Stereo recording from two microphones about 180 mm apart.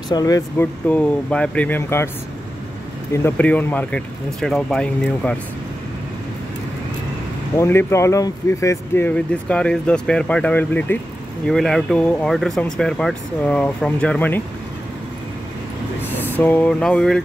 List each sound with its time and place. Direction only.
0.1 s speech: 20° left (ahead or behind)
0.8 s speech: 5° left (ahead or behind)
3.1 s speech: 15° left (ahead or behind)
7.5 s speech: 15° left (ahead or behind)
16.3 s speech: 10° left (ahead or behind)